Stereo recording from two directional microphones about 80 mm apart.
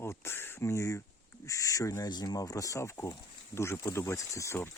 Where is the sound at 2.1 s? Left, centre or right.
Left.